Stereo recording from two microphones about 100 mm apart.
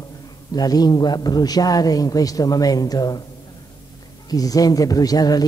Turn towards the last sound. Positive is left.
turn(degrees=40)  # may be behind; listen again after turning